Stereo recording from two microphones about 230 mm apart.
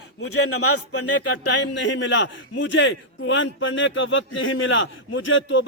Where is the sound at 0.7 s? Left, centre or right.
Left.